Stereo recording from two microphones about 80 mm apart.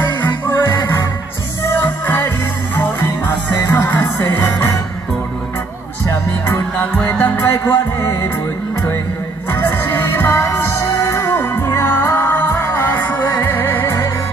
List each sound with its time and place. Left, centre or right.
0.0 s music: left
4.4 s music: left
6.4 s music: left
9.5 s music: left